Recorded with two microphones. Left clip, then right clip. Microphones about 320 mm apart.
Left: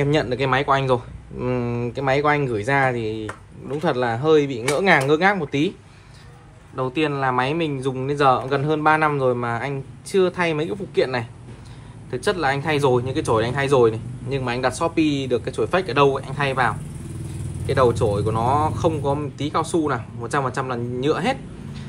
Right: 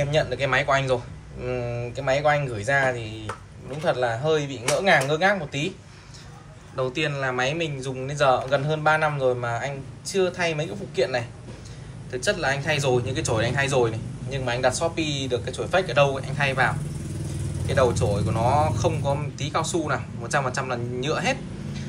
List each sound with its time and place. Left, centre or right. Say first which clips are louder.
0.0 s speech: left 3 dB; centre
6.8 s speech: left 4 dB; centre